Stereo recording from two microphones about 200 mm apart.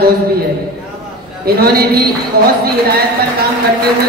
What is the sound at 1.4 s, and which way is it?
Speech, 50° right (ahead or behind).